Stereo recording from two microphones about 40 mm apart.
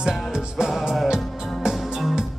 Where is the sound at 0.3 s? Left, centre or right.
Centre.